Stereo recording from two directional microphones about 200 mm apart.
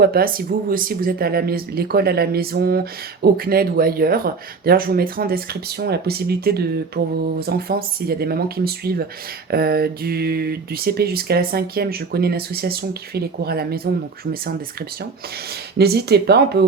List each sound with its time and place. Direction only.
0.0 s speech: 50° right (ahead or behind)
15.8 s speech: 55° right (ahead or behind)